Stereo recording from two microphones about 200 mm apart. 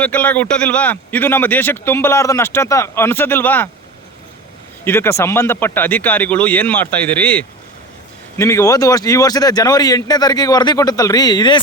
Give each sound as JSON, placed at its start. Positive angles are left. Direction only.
{"t": 0.0, "sound": "a man's voice", "side_deg": 5}
{"t": 4.9, "sound": "a man's voice", "side_deg": 10}